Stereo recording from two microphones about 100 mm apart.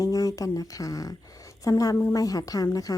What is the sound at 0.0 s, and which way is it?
A woman's voice, 35° left (ahead or behind).